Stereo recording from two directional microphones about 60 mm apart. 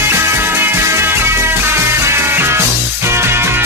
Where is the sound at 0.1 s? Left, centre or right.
Right.